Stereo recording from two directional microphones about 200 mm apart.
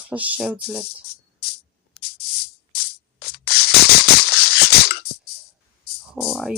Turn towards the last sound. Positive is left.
turn(degrees=0)  # may be behind; listen again after turning